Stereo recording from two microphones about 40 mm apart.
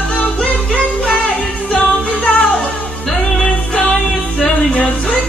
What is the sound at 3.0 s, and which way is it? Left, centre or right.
Music, centre.